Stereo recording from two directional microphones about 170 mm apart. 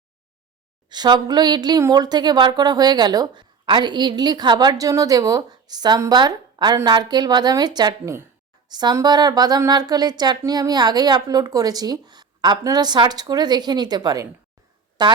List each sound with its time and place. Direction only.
0.9 s speech: 25° right (ahead or behind)